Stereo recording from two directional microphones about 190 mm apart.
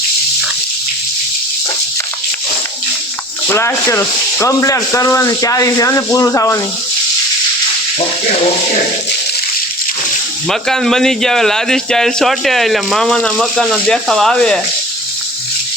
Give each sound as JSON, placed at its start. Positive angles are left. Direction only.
{"t": 3.5, "sound": "speech", "side_deg": 15}
{"t": 10.5, "sound": "a man's voice", "side_deg": 0}